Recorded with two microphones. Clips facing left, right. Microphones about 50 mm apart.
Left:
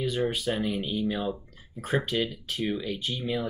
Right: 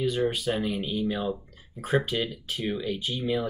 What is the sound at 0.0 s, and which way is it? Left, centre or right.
Speech, centre.